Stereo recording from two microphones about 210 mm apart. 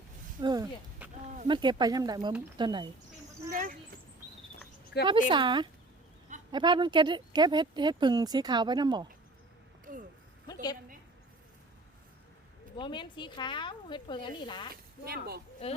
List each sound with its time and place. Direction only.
0.3 s a sound: 20° right (ahead or behind)
1.5 s speech: 20° right (ahead or behind)
3.5 s speech: 40° right (ahead or behind)
4.9 s speech: 55° left (ahead or behind)
5.3 s speech: 20° right (ahead or behind)
9.8 s a sound: 40° right (ahead or behind)
10.4 s a sound: 20° left (ahead or behind)
12.7 s speech: 20° left (ahead or behind)
14.7 s speech: 45° right (ahead or behind)